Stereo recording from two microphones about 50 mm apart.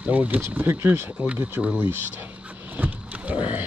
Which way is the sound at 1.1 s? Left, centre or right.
Right.